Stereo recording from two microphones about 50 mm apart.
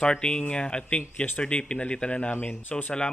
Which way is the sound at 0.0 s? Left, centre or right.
Centre.